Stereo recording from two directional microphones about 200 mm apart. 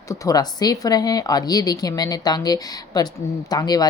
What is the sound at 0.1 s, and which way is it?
A woman's voice, 20° left (ahead or behind).